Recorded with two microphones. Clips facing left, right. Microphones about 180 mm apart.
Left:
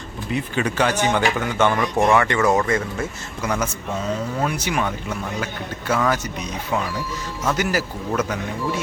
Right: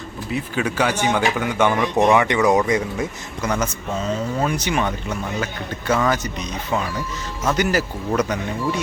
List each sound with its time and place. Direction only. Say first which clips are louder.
0.3 s speech: even; 5° right (ahead or behind)
3.4 s speech: right 1 dB; 5° left (ahead or behind)